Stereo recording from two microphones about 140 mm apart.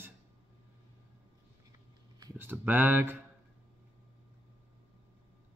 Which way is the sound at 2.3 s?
15° right (ahead or behind).